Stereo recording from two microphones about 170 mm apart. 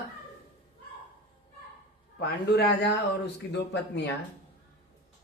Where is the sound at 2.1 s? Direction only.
70° left (ahead or behind).